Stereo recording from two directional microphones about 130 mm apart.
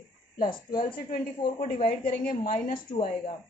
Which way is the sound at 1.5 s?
85° left.